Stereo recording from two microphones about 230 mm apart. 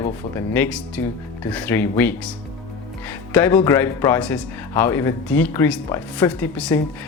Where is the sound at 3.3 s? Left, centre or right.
Centre.